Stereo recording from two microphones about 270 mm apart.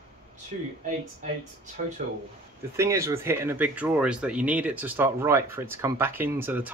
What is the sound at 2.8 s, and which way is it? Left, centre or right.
Speech, centre.